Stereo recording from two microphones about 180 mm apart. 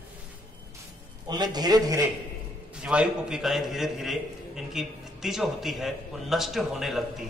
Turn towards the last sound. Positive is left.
turn(degrees=0)  # may be behind; listen again after turning